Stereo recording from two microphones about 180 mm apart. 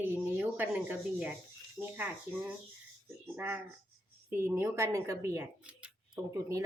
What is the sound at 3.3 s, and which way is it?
Speech, 10° right (ahead or behind).